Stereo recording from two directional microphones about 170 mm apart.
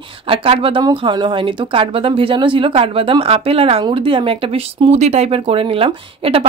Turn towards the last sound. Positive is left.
turn(degrees=-35)  # may be behind; listen again after turning